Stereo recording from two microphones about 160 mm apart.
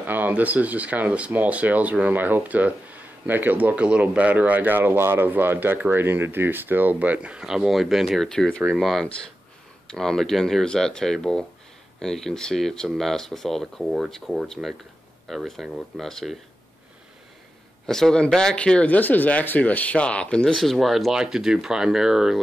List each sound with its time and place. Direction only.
0.0 s speech: 10° right (ahead or behind)
17.8 s speech: 5° left (ahead or behind)